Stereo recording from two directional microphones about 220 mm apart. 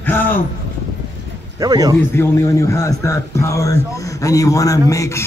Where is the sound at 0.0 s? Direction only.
10° left (ahead or behind).